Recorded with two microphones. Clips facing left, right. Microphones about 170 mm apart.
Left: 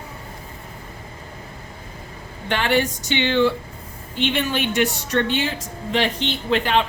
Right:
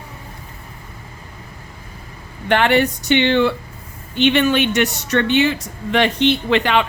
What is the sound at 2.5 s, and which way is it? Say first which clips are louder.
Speech: right 5 dB; 65° right (ahead or behind).